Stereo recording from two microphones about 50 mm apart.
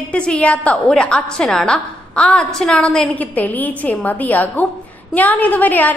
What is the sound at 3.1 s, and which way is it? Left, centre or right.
A woman's voice, left.